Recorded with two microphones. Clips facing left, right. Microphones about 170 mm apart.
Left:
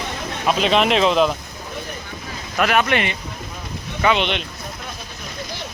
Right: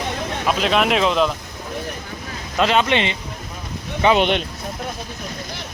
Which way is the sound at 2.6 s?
20° right (ahead or behind).